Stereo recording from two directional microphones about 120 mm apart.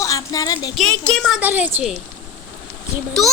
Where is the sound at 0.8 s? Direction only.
10° left (ahead or behind).